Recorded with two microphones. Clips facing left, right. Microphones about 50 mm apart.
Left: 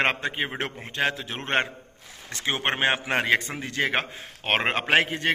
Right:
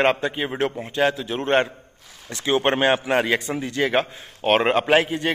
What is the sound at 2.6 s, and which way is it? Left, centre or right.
A man's voice, left.